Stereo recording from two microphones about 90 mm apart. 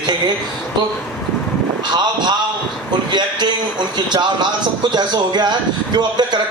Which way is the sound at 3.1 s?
55° right (ahead or behind).